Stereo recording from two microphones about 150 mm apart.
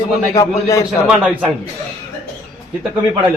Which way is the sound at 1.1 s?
10° right (ahead or behind).